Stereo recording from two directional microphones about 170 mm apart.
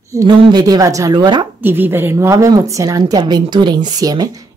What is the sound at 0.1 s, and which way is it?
A woman's voice, 20° right (ahead or behind).